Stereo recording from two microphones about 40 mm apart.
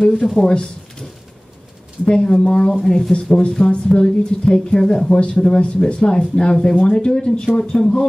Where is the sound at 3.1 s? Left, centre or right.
Left.